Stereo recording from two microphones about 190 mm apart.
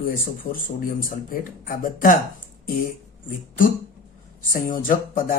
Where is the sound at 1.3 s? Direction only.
45° left (ahead or behind).